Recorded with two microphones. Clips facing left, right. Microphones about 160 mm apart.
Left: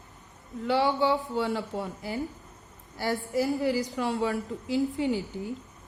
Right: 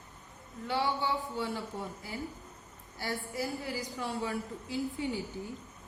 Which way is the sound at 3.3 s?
90° left.